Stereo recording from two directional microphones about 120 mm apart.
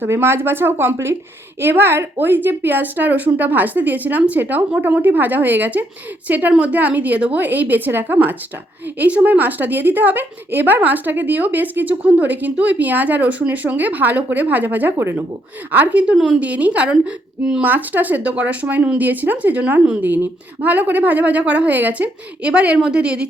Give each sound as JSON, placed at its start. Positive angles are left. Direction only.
{"t": 0.0, "sound": "a woman's voice", "side_deg": -20}